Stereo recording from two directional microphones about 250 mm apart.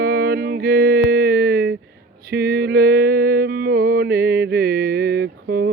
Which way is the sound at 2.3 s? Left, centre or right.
Right.